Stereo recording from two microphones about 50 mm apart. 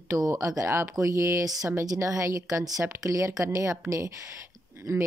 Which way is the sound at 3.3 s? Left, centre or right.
Right.